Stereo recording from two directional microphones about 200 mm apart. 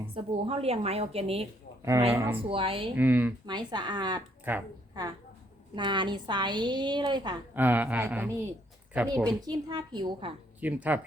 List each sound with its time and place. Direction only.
0.1 s a woman's voice: 30° right (ahead or behind)
1.8 s speech: 15° right (ahead or behind)
2.5 s a woman's voice: 25° right (ahead or behind)
2.9 s speech: 10° right (ahead or behind)
3.4 s a woman's voice: 20° right (ahead or behind)
4.5 s speech: 10° right (ahead or behind)
5.7 s a woman's voice: 25° right (ahead or behind)
7.5 s a woman's voice: 10° right (ahead or behind); by 10.3 s 25° right (ahead or behind)
10.6 s speech: 10° right (ahead or behind)